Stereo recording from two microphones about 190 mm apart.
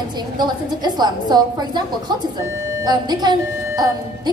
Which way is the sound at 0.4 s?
20° right (ahead or behind).